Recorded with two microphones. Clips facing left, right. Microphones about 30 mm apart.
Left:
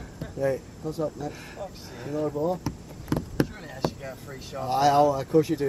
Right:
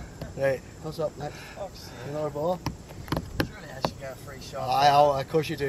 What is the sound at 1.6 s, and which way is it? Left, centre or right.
Speech, centre.